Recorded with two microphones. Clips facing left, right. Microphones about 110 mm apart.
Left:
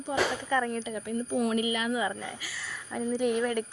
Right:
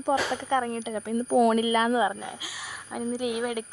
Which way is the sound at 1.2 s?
65° right (ahead or behind).